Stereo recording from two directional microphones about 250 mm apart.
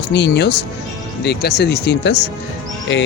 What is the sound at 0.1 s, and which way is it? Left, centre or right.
Speech, left.